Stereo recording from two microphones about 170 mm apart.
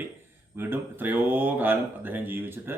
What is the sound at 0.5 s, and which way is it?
Speech, 10° right (ahead or behind).